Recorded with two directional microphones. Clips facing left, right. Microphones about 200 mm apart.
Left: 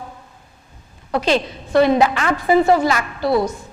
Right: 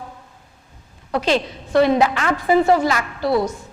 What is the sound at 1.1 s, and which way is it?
A woman's voice, 10° left (ahead or behind).